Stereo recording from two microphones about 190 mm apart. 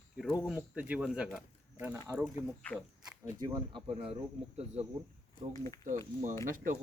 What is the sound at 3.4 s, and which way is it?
Speech, 25° right (ahead or behind).